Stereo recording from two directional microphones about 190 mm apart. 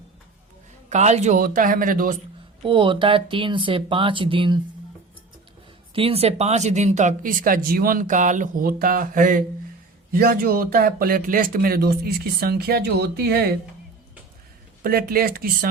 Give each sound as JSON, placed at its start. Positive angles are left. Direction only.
{"t": 0.9, "sound": "speech", "side_deg": -35}
{"t": 2.6, "sound": "speech", "side_deg": -25}
{"t": 5.9, "sound": "speech", "side_deg": -30}
{"t": 14.8, "sound": "speech", "side_deg": -50}